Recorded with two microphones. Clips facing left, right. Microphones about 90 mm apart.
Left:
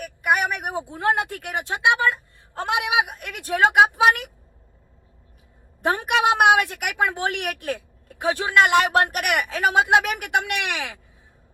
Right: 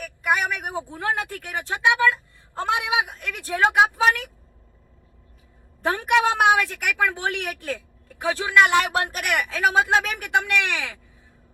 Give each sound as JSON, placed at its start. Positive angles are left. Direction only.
{"t": 0.0, "sound": "speech", "side_deg": 20}
{"t": 5.8, "sound": "speech", "side_deg": 20}